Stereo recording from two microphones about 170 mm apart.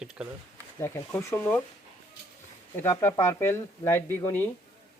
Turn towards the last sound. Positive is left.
turn(degrees=10)  # may be behind; listen again after turning